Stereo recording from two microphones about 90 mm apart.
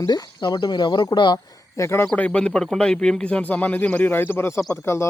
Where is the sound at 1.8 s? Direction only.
30° left (ahead or behind).